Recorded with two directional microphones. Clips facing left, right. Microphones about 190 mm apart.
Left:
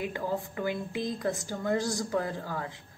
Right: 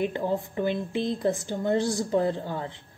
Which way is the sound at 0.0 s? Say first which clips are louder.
Right 5 dB; 25° right (ahead or behind).